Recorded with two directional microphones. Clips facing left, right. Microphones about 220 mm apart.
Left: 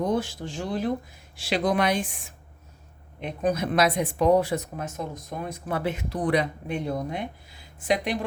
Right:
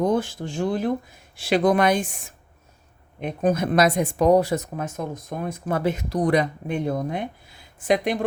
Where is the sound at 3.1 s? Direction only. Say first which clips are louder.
Right 4 dB; 50° right (ahead or behind).